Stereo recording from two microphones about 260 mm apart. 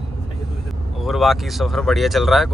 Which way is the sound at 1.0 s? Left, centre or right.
Centre.